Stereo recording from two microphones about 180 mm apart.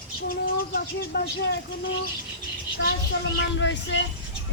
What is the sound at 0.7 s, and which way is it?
Speech, 60° left (ahead or behind).